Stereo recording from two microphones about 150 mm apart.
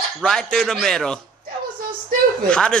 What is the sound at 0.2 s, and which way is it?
A man's voice, 5° left (ahead or behind).